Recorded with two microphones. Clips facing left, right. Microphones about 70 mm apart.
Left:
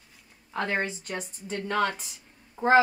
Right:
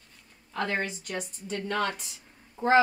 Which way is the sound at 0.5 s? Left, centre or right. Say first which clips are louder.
Left 1 dB; left.